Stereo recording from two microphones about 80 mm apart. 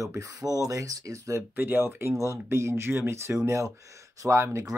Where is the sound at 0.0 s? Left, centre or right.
Right.